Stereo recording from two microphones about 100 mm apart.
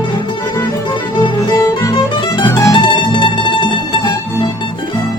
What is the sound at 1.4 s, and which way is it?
Music, 40° left (ahead or behind).